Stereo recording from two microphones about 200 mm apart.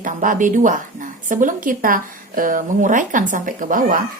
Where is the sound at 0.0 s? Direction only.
40° right (ahead or behind).